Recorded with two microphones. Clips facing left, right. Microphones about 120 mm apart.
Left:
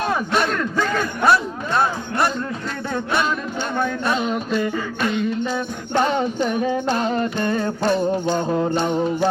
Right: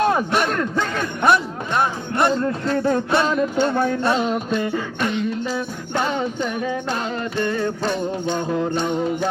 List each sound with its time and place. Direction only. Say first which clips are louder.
0.3 s speech: even; 15° right (ahead or behind)
8.3 s music: left 2 dB; 35° left (ahead or behind)